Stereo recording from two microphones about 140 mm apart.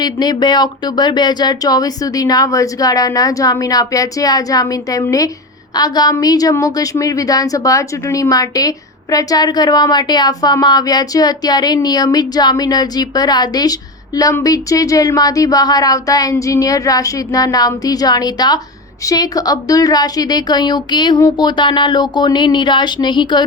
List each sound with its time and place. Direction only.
0.0 s a woman's voice: 30° left (ahead or behind)